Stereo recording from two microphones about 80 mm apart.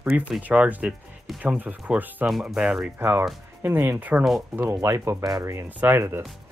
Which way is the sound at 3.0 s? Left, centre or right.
Right.